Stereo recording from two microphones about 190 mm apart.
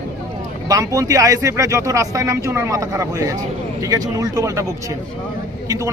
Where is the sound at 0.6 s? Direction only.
20° right (ahead or behind).